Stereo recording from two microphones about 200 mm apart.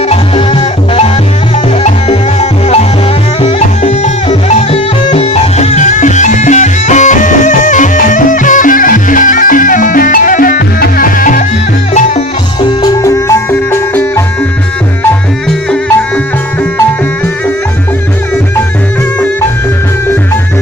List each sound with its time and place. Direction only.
0.1 s music: 30° left (ahead or behind)
12.5 s music: 20° left (ahead or behind)
15.7 s music: 5° left (ahead or behind)